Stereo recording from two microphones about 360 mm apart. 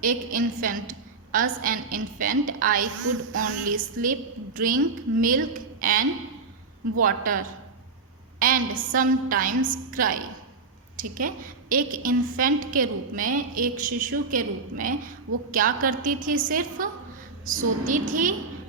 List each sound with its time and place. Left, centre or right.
0.0 s a woman's voice: right